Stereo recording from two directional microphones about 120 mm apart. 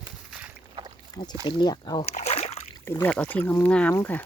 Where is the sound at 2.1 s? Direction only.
60° left (ahead or behind).